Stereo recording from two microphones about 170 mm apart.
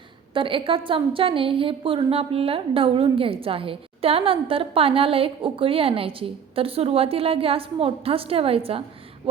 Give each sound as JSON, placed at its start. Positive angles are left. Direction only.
{"t": 0.3, "sound": "a woman's voice", "side_deg": -30}